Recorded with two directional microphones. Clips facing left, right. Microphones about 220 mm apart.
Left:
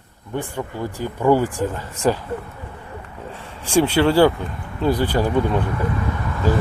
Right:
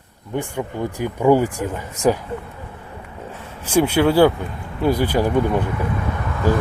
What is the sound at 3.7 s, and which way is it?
Speech, 10° right (ahead or behind).